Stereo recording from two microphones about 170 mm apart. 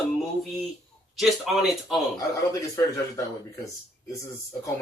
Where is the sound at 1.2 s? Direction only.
Centre (ahead or behind).